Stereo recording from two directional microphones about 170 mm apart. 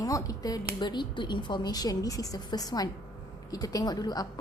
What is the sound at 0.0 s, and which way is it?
A woman's voice, 20° left (ahead or behind).